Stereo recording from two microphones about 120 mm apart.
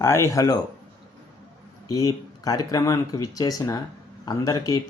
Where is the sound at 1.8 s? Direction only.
30° left (ahead or behind).